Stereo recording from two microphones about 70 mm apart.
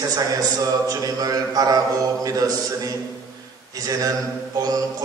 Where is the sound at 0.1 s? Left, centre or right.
Right.